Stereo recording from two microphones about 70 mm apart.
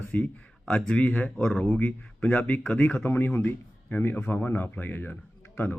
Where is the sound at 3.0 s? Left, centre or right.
Left.